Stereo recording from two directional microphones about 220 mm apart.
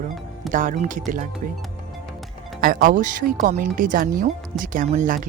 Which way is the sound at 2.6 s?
40° right (ahead or behind).